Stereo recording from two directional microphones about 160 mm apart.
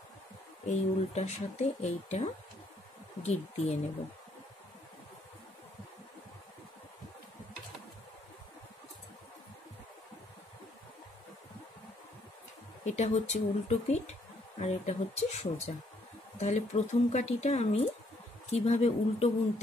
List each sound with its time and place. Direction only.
0.7 s speech: 45° left (ahead or behind)
12.8 s speech: 45° left (ahead or behind)